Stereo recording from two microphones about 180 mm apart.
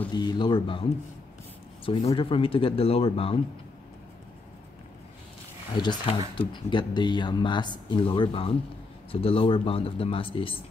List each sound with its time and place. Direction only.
0.1 s speech: 25° left (ahead or behind)
1.9 s speech: 30° left (ahead or behind)
5.8 s speech: 30° left (ahead or behind)